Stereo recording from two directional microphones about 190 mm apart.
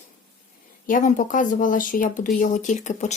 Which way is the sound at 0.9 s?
45° left (ahead or behind).